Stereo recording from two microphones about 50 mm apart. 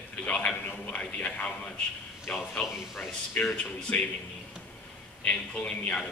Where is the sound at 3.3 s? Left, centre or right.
Left.